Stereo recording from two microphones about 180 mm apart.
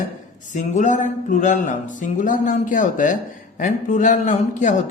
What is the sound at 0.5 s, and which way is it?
A man's voice, 45° left (ahead or behind).